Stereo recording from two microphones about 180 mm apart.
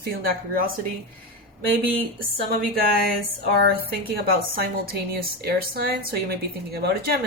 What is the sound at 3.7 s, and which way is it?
A woman's voice, 60° right (ahead or behind).